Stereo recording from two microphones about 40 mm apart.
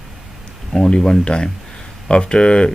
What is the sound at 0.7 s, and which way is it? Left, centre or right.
Speech, centre.